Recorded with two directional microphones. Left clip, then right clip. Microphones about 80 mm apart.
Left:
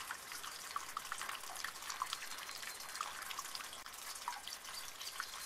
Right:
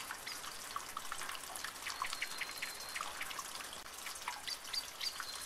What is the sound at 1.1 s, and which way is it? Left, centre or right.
Water, left.